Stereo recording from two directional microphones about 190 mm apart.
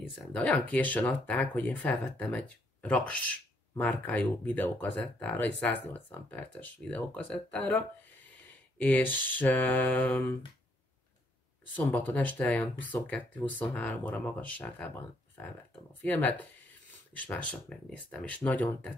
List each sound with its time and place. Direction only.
0.1 s speech: 5° left (ahead or behind)
11.7 s speech: 10° left (ahead or behind)
16.0 s speech: 10° left (ahead or behind)